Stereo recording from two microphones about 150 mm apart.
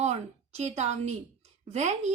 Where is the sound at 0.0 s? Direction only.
50° right (ahead or behind).